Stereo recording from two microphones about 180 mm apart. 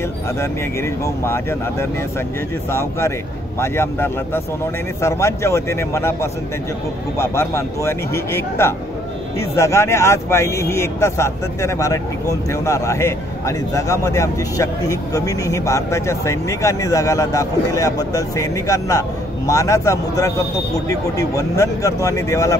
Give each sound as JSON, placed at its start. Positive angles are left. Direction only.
{"t": 1.0, "sound": "speech", "side_deg": 15}
{"t": 7.2, "sound": "speech", "side_deg": 15}